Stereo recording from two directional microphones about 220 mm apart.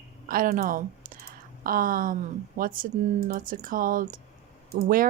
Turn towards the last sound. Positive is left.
turn(degrees=-40)  # may be behind; listen again after turning